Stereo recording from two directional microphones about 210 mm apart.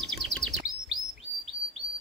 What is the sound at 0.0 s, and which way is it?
Chirp, centre (ahead or behind).